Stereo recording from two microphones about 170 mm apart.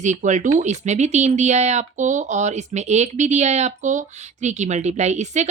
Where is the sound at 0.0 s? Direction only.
45° right (ahead or behind).